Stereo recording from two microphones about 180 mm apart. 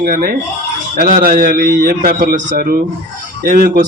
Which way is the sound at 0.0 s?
50° right (ahead or behind).